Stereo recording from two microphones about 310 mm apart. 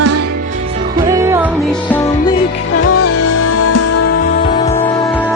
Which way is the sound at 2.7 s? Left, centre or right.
Left.